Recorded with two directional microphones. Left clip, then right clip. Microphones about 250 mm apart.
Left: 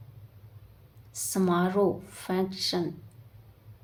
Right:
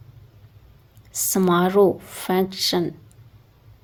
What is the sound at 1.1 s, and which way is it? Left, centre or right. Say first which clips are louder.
A woman's voice: right 8 dB; right.